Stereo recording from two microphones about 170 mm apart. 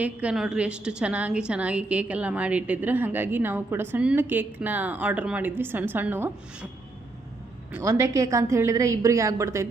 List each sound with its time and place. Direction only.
0.0 s a woman's voice: 5° right (ahead or behind)
7.7 s a woman's voice: 15° right (ahead or behind)